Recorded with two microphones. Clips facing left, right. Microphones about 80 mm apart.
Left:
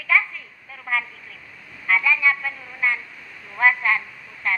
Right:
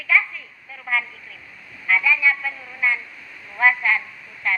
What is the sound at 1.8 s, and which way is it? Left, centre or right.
Speech, left.